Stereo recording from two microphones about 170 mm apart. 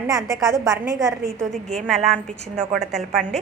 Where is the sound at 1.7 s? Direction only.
Centre (ahead or behind).